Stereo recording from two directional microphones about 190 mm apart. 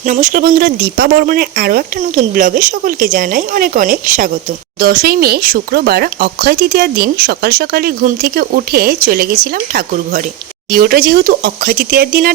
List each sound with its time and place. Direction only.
0.0 s speech: 40° right (ahead or behind)